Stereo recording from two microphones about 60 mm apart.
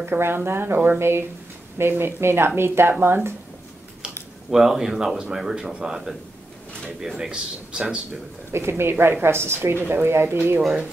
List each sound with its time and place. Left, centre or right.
0.0 s a woman's voice: right
4.5 s speech: centre
8.5 s a woman's voice: right